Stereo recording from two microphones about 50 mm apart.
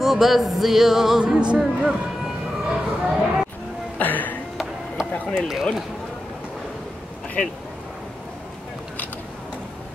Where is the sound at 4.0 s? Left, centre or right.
Left.